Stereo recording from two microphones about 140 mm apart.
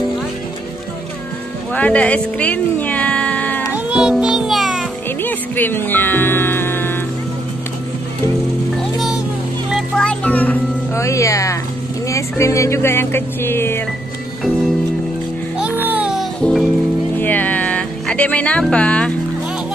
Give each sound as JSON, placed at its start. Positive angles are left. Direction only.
{"t": 1.7, "sound": "speech", "side_deg": 10}
{"t": 3.7, "sound": "music", "side_deg": -5}
{"t": 5.2, "sound": "music", "side_deg": 15}
{"t": 8.9, "sound": "music", "side_deg": 0}
{"t": 12.1, "sound": "speech", "side_deg": 20}
{"t": 15.6, "sound": "music", "side_deg": -15}